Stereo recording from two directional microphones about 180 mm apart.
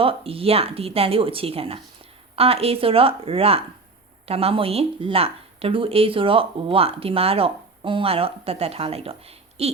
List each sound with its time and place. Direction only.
0.0 s a woman's voice: 30° right (ahead or behind)